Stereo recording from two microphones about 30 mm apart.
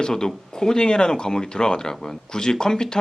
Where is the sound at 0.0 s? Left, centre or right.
Left.